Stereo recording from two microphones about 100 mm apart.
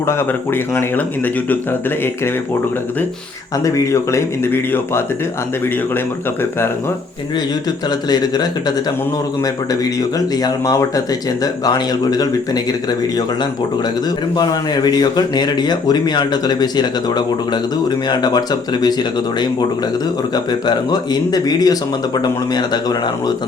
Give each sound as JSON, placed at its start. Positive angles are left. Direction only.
{"t": 0.1, "sound": "speech", "side_deg": 25}
{"t": 3.6, "sound": "speech", "side_deg": 35}
{"t": 7.9, "sound": "speech", "side_deg": 45}
{"t": 9.8, "sound": "speech", "side_deg": 40}
{"t": 14.3, "sound": "speech", "side_deg": 40}
{"t": 20.3, "sound": "speech", "side_deg": 45}